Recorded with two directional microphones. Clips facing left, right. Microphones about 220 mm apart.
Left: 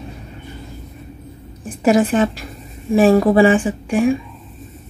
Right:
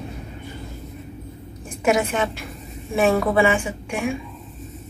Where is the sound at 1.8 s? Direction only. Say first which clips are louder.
Left 6 dB; 35° left (ahead or behind).